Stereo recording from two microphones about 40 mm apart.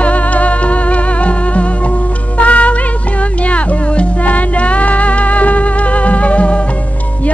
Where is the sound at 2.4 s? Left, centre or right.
Left.